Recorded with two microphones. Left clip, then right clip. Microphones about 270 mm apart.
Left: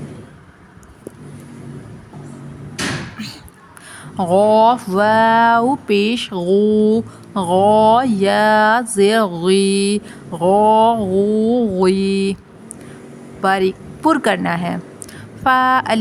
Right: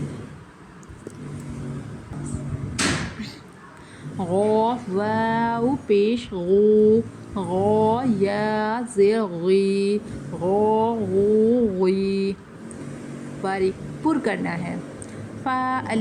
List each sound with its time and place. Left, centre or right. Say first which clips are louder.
4.2 s speech: left 9 dB; left
13.4 s a woman's voice: left 8 dB; left